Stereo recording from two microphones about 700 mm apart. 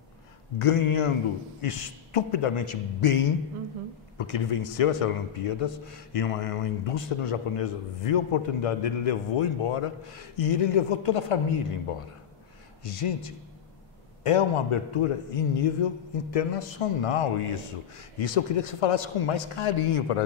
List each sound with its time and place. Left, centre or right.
0.6 s a man's voice: left
4.2 s a man's voice: left
12.8 s a man's voice: left